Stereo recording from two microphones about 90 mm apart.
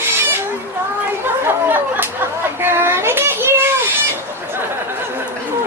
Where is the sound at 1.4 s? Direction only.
25° right (ahead or behind).